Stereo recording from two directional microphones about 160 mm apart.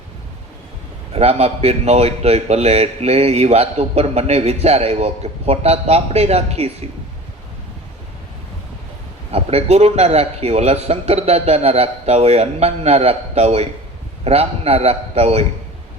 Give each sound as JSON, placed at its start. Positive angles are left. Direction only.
{"t": 1.1, "sound": "a man's voice", "side_deg": -40}
{"t": 9.3, "sound": "a man's voice", "side_deg": -40}